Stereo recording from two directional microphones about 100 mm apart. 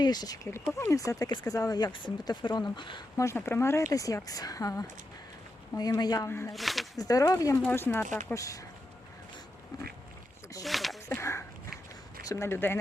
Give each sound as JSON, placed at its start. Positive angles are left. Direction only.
{"t": 0.0, "sound": "speech", "side_deg": 45}
{"t": 0.8, "sound": "speech", "side_deg": 35}
{"t": 1.9, "sound": "speech", "side_deg": 50}
{"t": 3.2, "sound": "speech", "side_deg": 30}
{"t": 6.2, "sound": "speech", "side_deg": 25}
{"t": 6.5, "sound": "speech", "side_deg": 0}
{"t": 6.9, "sound": "speech", "side_deg": 35}
{"t": 7.7, "sound": "speech", "side_deg": 20}
{"t": 10.6, "sound": "a sound", "side_deg": 0}
{"t": 11.1, "sound": "a sound", "side_deg": 25}
{"t": 12.3, "sound": "speech", "side_deg": 25}